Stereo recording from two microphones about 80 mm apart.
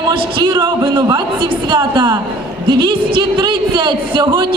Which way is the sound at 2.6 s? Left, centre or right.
Right.